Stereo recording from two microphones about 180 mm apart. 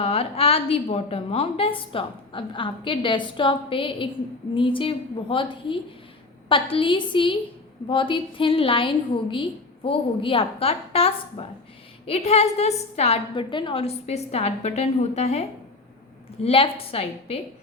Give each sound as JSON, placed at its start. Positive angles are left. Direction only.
{"t": 0.0, "sound": "a woman's voice", "side_deg": 35}